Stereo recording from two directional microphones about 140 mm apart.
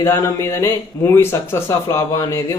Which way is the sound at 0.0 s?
20° left (ahead or behind).